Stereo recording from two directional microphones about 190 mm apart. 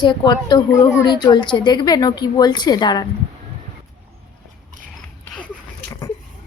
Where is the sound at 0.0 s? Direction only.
25° left (ahead or behind).